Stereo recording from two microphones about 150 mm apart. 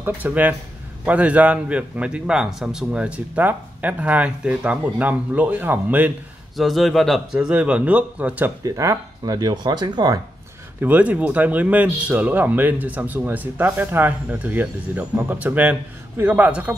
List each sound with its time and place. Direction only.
0.0 s speech: 10° right (ahead or behind)
6.5 s a man's voice: centre (ahead or behind)
8.6 s speech: 25° right (ahead or behind)
10.8 s speech: 10° right (ahead or behind)